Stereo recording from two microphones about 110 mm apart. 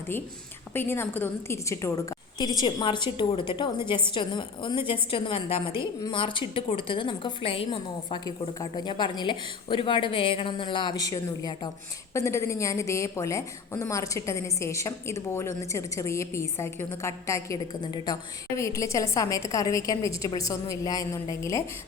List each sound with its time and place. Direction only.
0.7 s a woman's voice: 20° left (ahead or behind); by 5.7 s 55° left (ahead or behind)
5.8 s a woman's voice: 45° left (ahead or behind)
8.2 s a woman's voice: 40° left (ahead or behind)
17.7 s a woman's voice: 40° left (ahead or behind)
18.5 s a woman's voice: 30° left (ahead or behind)